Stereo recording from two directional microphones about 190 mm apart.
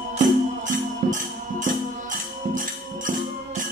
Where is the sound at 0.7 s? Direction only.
45° right (ahead or behind).